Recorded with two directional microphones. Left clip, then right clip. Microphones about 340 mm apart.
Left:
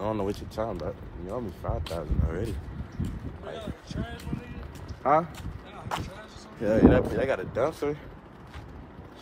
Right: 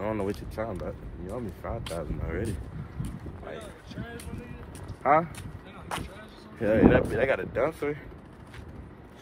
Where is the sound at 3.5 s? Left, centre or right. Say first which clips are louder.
Left 4 dB; left.